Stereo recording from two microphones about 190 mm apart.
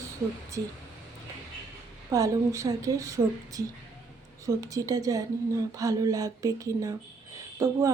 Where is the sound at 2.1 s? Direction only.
15° right (ahead or behind).